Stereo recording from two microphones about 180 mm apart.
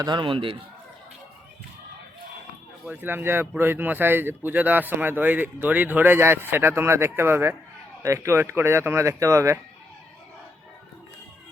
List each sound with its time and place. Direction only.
0.0 s a man's voice: 25° right (ahead or behind)
2.8 s speech: 10° right (ahead or behind)